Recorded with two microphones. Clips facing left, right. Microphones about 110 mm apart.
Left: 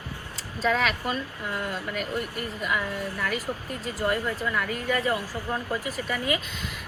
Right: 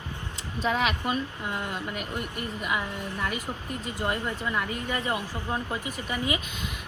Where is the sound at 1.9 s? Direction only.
40° left (ahead or behind).